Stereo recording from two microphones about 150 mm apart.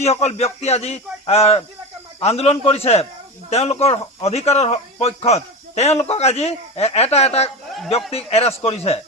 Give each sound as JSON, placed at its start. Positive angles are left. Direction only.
{"t": 0.0, "sound": "a man's voice", "side_deg": 45}